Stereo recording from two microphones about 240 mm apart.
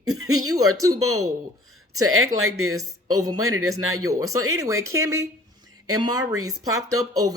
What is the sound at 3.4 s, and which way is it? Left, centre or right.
Speech, right.